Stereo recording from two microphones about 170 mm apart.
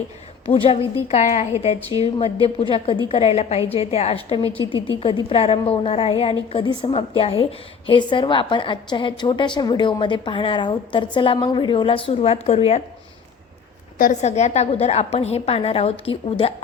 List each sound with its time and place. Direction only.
0.4 s a woman's voice: 30° left (ahead or behind)
14.0 s a woman's voice: 45° left (ahead or behind)